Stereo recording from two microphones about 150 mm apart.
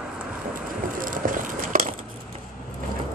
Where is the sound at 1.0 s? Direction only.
65° right (ahead or behind).